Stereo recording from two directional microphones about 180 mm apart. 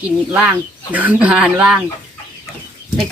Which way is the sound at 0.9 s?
10° right (ahead or behind).